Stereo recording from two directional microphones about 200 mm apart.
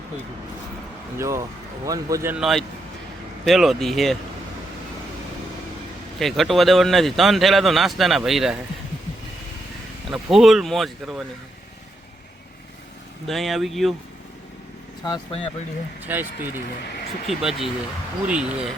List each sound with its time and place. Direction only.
1.2 s speech: 15° right (ahead or behind)
2.3 s speech: centre (ahead or behind)
6.1 s speech: centre (ahead or behind)
10.1 s speech: centre (ahead or behind)
13.2 s speech: centre (ahead or behind)
15.0 s speech: 20° left (ahead or behind)
16.0 s speech: 10° right (ahead or behind)